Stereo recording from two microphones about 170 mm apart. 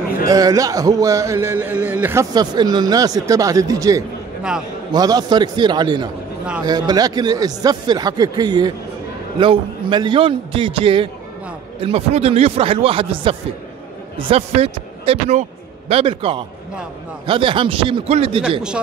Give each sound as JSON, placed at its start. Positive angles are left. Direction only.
{"t": 0.3, "sound": "speech", "side_deg": -20}
{"t": 2.3, "sound": "speech", "side_deg": -25}
{"t": 4.4, "sound": "a man's voice", "side_deg": -5}
{"t": 4.9, "sound": "a man's voice", "side_deg": -20}